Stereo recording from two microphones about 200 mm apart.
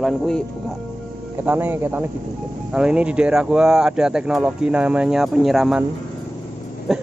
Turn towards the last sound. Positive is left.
turn(degrees=0)  # may be behind; listen again after turning